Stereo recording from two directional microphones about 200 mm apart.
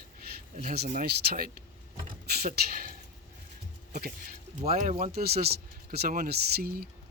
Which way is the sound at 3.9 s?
45° right (ahead or behind).